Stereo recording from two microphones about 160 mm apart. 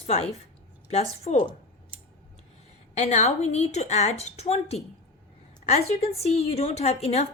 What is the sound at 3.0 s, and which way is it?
A woman's voice, 45° left (ahead or behind).